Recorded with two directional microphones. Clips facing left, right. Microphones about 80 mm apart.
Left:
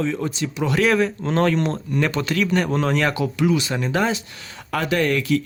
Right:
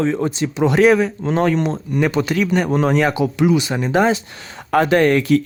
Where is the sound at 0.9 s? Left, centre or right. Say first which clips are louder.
Right 2 dB; centre.